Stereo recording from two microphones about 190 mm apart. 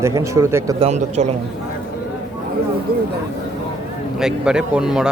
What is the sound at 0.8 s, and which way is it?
Speech, 35° right (ahead or behind).